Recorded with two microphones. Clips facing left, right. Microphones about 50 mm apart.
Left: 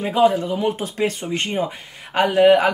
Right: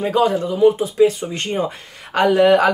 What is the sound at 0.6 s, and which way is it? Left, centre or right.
Speech, left.